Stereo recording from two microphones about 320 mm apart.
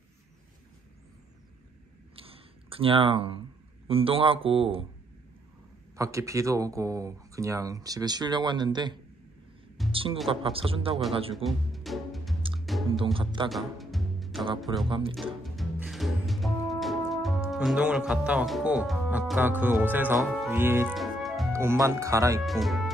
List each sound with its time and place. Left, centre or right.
2.1 s a sound: centre
3.8 s speech: centre
5.9 s speech: centre
9.8 s music: centre
10.4 s speech: centre
11.3 s speech: centre
12.5 s music: centre
12.8 s speech: centre
13.5 s music: centre
14.9 s speech: centre
15.4 s music: centre